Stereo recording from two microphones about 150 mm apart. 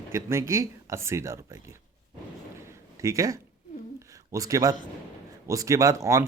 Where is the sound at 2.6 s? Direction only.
20° right (ahead or behind).